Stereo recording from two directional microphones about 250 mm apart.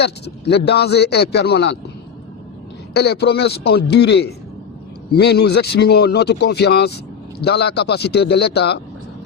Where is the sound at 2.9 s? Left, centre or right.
Left.